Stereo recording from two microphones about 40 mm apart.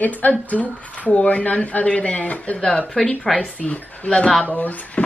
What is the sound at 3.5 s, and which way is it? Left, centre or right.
Speech, left.